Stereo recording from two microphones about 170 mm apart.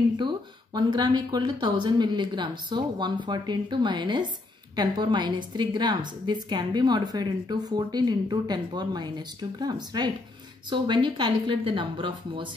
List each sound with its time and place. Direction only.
0.7 s a woman's voice: 25° right (ahead or behind)